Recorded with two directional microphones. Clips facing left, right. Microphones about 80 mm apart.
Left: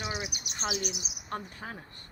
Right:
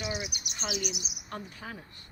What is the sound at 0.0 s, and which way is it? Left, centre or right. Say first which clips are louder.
Bird: right 1 dB; left.